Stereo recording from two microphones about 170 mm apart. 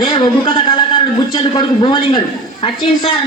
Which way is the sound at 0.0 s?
30° left (ahead or behind).